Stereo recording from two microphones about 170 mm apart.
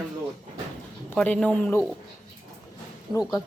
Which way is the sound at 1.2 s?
5° left (ahead or behind).